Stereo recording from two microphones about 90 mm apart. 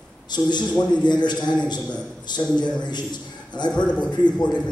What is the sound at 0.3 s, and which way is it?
A man's voice, 55° left (ahead or behind).